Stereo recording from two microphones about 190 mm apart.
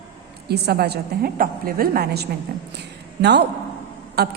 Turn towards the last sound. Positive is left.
turn(degrees=-60)  # may be behind; listen again after turning